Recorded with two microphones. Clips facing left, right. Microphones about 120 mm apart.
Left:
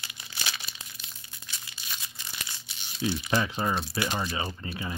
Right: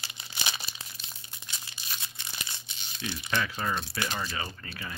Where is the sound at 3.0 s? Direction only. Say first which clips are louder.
Left 4 dB; 30° left (ahead or behind).